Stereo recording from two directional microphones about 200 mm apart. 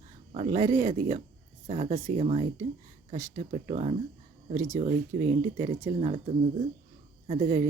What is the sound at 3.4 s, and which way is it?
Speech, 35° right (ahead or behind).